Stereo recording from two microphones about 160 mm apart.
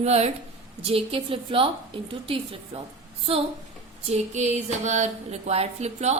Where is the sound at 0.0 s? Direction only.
45° right (ahead or behind).